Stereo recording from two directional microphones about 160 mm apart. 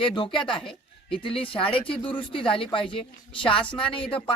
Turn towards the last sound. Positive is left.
turn(degrees=35)  # may be behind; listen again after turning